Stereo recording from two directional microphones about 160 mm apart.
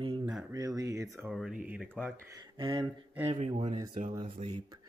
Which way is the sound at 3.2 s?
45° right (ahead or behind).